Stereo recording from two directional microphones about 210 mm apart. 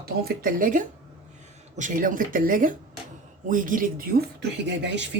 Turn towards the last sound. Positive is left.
turn(degrees=-55)  # may be behind; listen again after turning